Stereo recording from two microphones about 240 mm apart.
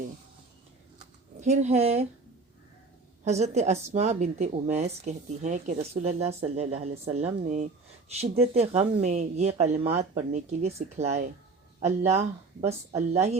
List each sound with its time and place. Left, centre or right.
1.4 s speech: right
3.2 s speech: right